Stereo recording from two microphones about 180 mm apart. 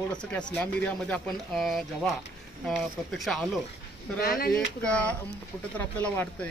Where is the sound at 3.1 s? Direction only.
Centre (ahead or behind).